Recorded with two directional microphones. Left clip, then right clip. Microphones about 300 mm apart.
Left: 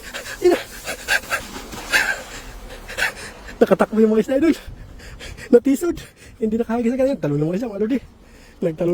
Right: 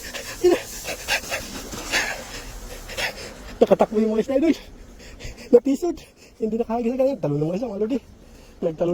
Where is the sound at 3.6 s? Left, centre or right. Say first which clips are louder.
Left 2 dB; left.